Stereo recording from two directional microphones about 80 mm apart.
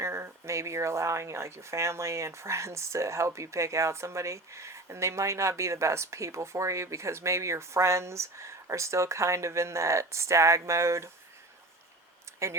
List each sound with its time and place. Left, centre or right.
0.0 s speech: right
12.4 s speech: right